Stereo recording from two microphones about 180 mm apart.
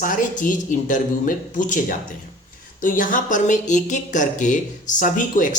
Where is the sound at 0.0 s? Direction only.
45° left (ahead or behind).